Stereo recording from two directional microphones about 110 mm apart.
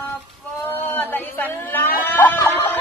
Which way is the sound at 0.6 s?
20° left (ahead or behind).